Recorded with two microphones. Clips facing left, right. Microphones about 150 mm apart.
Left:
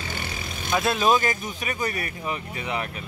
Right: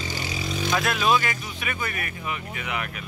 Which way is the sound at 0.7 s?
25° left (ahead or behind).